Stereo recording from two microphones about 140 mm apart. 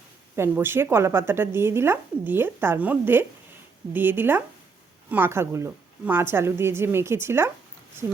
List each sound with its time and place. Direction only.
0.3 s a woman's voice: 15° right (ahead or behind)